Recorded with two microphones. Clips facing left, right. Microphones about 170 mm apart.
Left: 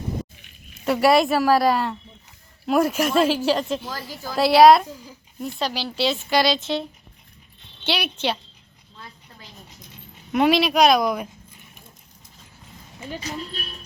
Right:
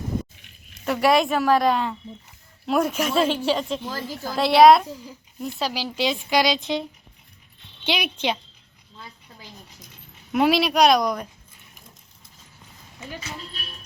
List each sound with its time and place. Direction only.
0.7 s a woman's voice: 5° left (ahead or behind); by 6.8 s 15° right (ahead or behind)
7.9 s speech: 10° right (ahead or behind)
10.3 s a woman's voice: centre (ahead or behind)
13.1 s speech: 30° left (ahead or behind)